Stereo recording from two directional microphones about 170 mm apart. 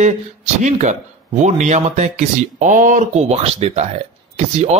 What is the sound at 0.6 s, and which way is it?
Speech, 45° right (ahead or behind).